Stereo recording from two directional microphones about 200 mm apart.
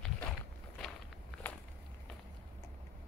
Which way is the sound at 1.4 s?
10° left (ahead or behind).